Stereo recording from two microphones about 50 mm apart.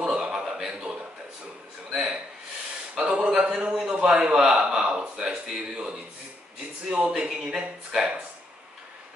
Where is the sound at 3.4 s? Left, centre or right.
Centre.